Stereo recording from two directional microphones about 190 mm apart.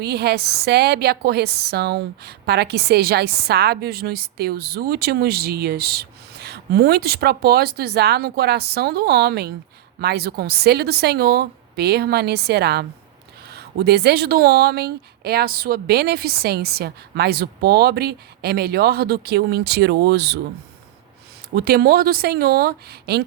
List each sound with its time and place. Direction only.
0.0 s a woman's voice: 60° right (ahead or behind)
21.5 s speech: 55° right (ahead or behind)